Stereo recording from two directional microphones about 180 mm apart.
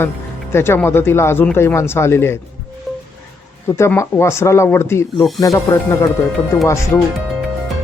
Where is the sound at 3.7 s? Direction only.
15° left (ahead or behind).